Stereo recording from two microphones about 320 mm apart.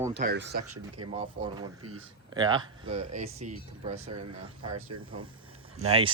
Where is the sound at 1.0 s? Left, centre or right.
Centre.